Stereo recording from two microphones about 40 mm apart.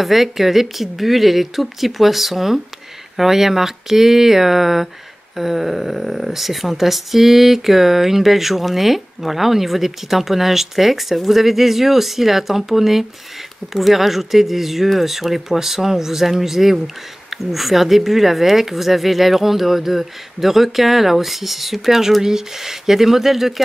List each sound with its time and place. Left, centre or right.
0.0 s speech: centre